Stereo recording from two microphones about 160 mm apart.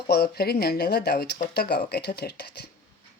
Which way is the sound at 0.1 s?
85° left.